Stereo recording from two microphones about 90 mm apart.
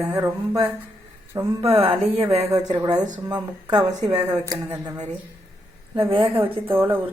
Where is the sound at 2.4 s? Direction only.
40° right (ahead or behind).